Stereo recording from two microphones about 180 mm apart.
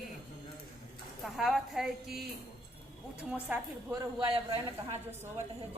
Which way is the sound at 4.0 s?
25° right (ahead or behind).